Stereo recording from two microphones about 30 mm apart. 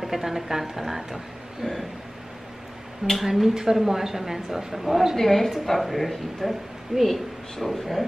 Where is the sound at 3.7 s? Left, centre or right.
Centre.